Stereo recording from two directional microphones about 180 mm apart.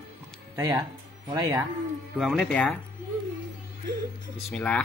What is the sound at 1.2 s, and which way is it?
Speech, 20° right (ahead or behind).